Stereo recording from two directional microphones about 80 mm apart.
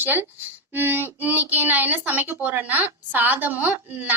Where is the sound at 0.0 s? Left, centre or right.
Right.